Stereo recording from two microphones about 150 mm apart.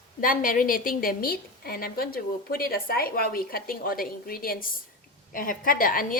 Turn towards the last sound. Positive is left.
turn(degrees=70)  # may be behind; listen again after turning